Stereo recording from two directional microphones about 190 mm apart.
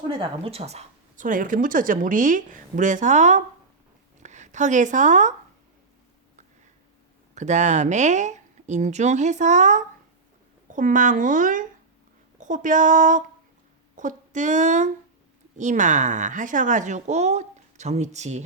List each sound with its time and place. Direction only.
0.2 s a woman's voice: 30° right (ahead or behind)
7.3 s speech: 40° right (ahead or behind)